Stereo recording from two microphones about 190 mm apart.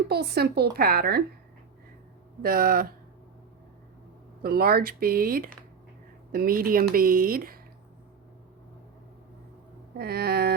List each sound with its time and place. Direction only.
0.1 s speech: 55° right (ahead or behind)
2.4 s speech: 50° right (ahead or behind)
4.4 s speech: 55° right (ahead or behind)
10.0 s speech: 55° right (ahead or behind)